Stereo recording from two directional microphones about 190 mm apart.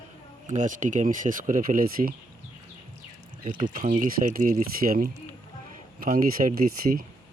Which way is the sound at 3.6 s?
45° right (ahead or behind).